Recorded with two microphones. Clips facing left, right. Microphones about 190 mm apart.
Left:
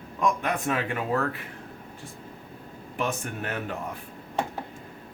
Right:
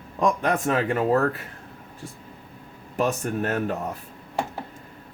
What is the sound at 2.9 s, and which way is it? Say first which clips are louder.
Speech: right 6 dB; 40° right (ahead or behind).